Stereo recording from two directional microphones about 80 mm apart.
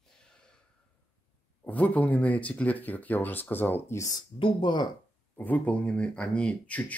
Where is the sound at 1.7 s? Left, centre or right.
Centre.